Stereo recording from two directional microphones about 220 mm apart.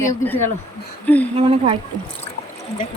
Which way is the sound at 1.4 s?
25° right (ahead or behind).